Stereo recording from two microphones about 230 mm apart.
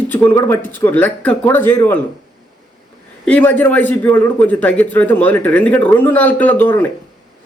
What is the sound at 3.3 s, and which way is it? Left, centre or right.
A man's voice, centre.